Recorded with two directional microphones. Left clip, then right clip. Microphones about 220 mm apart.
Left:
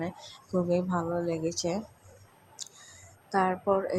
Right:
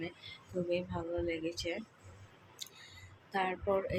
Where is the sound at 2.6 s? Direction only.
25° left (ahead or behind).